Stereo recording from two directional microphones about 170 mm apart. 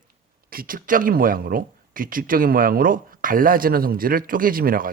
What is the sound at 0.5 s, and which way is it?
A man's voice, 55° right (ahead or behind).